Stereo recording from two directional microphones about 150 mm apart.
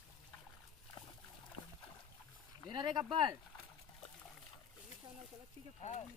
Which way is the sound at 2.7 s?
30° right (ahead or behind).